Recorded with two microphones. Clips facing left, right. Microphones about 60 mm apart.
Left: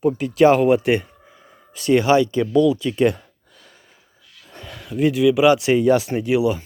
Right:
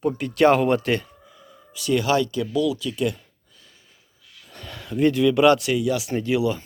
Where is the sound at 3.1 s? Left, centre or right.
Left.